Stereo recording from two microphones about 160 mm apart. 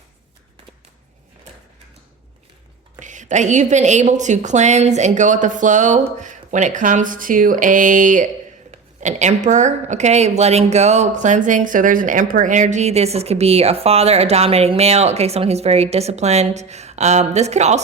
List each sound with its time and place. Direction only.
3.0 s speech: 50° right (ahead or behind)